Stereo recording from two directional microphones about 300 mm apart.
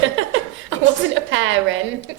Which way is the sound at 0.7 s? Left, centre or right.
Right.